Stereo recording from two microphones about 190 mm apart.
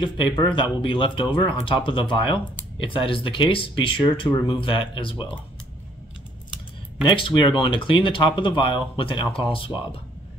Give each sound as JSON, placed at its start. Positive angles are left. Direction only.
{"t": 0.0, "sound": "speech", "side_deg": 25}
{"t": 7.1, "sound": "speech", "side_deg": 25}